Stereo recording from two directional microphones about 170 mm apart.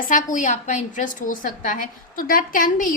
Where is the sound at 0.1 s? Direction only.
50° left (ahead or behind).